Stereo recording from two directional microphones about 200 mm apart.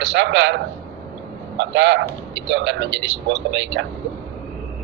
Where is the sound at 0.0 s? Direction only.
65° right (ahead or behind).